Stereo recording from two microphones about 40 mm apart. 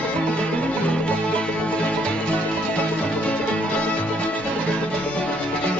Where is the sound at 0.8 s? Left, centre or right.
Left.